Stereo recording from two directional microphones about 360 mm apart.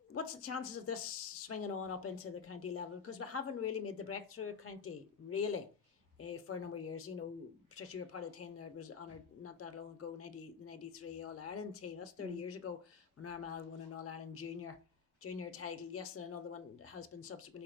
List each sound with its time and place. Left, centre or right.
0.1 s speech: left